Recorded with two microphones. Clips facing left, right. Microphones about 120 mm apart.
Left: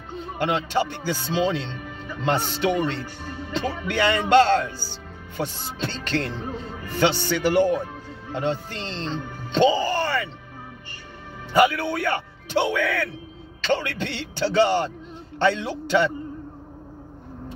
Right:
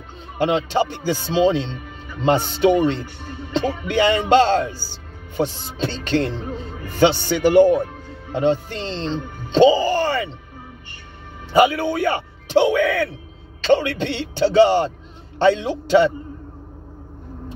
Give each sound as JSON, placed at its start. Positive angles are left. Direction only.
{"t": 0.4, "sound": "speech", "side_deg": -20}
{"t": 11.5, "sound": "speech", "side_deg": -20}